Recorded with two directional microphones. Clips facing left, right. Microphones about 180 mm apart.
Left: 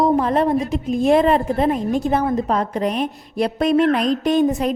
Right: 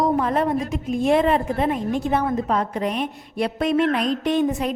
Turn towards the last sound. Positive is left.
turn(degrees=40)  # may be behind; listen again after turning